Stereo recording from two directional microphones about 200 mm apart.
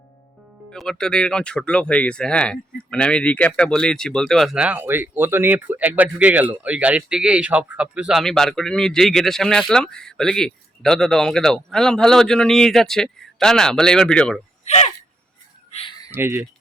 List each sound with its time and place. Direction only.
0.7 s speech: 5° left (ahead or behind)
14.6 s a sound: 35° left (ahead or behind)
16.1 s speech: 10° right (ahead or behind)